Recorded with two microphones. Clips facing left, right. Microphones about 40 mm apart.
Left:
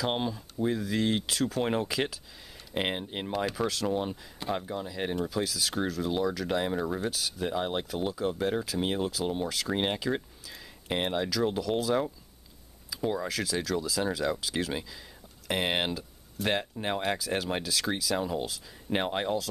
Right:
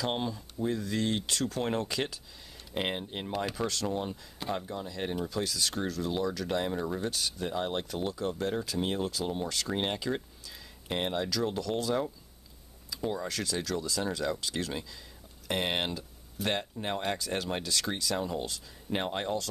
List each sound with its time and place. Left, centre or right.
0.0 s speech: centre
3.3 s speech: centre
16.4 s speech: centre
16.7 s speech: centre